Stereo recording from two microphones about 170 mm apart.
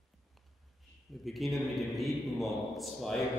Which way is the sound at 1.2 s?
Centre (ahead or behind).